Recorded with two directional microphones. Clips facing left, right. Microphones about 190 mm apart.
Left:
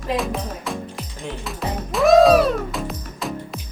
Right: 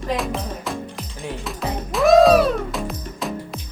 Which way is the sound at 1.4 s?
Centre (ahead or behind).